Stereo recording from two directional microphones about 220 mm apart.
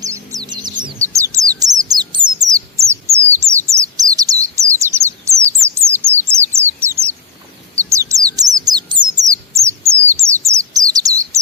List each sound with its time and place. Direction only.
0.0 s bird: 15° right (ahead or behind)